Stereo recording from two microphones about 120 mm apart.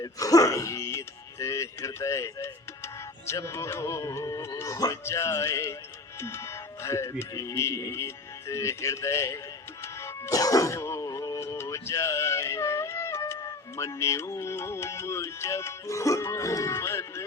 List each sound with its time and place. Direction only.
0.0 s speech: 30° left (ahead or behind)
9.8 s music: 20° left (ahead or behind)